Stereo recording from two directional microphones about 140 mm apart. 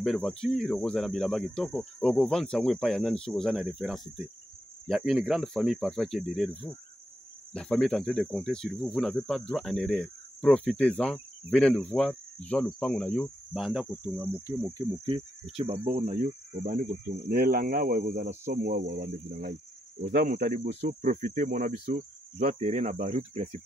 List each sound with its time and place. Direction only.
0.0 s speech: 5° left (ahead or behind)
10.8 s cricket: 10° left (ahead or behind)
13.5 s speech: centre (ahead or behind)
14.1 s speech: 15° right (ahead or behind)
15.5 s speech: 45° right (ahead or behind)
16.6 s speech: 70° right (ahead or behind); by 20.6 s 90° right
21.0 s speech: 70° right (ahead or behind)
22.4 s speech: 55° right (ahead or behind)